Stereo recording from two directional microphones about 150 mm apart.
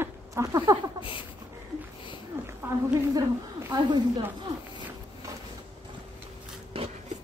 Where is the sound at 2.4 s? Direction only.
15° right (ahead or behind).